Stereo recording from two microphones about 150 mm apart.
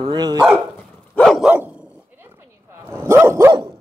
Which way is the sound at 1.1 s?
5° left (ahead or behind).